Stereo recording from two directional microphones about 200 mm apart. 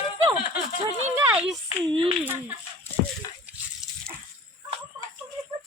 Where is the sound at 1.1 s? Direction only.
5° right (ahead or behind).